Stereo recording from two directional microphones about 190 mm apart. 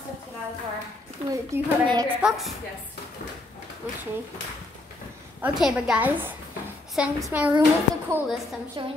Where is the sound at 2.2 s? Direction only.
5° right (ahead or behind).